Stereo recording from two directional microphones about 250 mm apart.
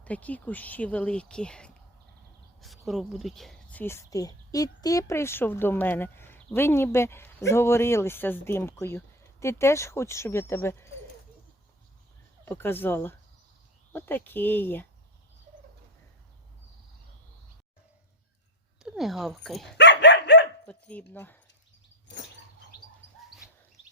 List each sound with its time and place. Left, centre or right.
0.0 s speech: centre
12.5 s speech: centre
18.8 s speech: centre
19.7 s dog: left
20.7 s dog: centre
21.1 s speech: centre
22.1 s a sound: left